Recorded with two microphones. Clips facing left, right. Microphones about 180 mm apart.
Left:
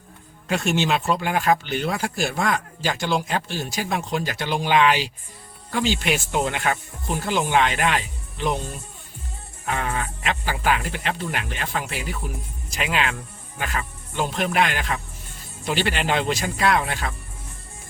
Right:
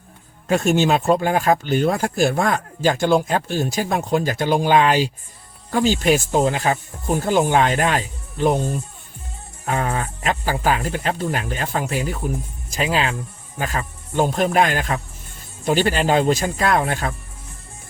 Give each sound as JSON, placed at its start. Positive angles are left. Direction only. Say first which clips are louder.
{"t": 0.4, "sound": "speech", "louder": "right 5 dB", "side_deg": -45}
{"t": 7.1, "sound": "speech", "louder": "right 5 dB", "side_deg": -45}